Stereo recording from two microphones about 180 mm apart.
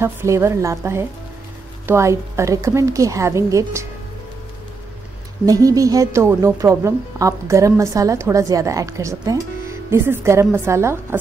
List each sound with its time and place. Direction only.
0.0 s a woman's voice: 15° right (ahead or behind)
5.4 s a woman's voice: 20° right (ahead or behind)